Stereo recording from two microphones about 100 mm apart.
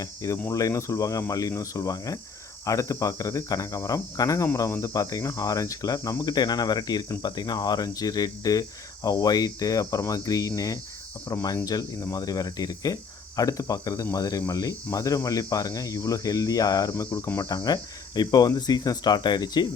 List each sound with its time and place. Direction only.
0.0 s speech: 35° left (ahead or behind)